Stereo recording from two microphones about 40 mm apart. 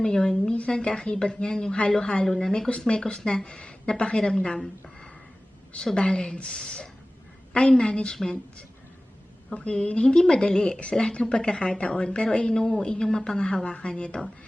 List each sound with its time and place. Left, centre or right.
0.0 s a woman's voice: left
6.0 s a woman's voice: left
9.6 s a woman's voice: left